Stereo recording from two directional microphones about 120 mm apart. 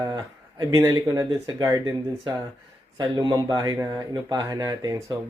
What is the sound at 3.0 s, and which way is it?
Speech, 35° right (ahead or behind).